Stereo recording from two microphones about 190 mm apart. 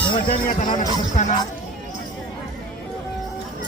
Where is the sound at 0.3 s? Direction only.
50° left (ahead or behind).